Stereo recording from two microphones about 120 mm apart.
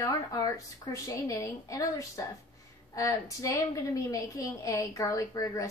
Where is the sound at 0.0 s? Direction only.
30° left (ahead or behind).